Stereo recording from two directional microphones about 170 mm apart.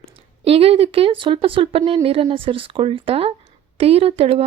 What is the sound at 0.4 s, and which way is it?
Speech, 35° right (ahead or behind).